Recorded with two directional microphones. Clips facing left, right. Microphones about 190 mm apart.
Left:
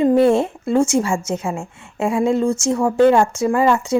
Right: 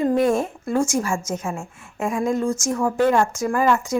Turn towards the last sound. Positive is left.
turn(degrees=30)  # may be behind; listen again after turning